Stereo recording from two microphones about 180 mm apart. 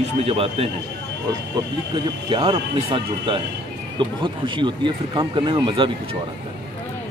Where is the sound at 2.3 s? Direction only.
30° right (ahead or behind).